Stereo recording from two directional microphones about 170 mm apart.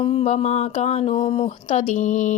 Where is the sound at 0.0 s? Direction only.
35° left (ahead or behind).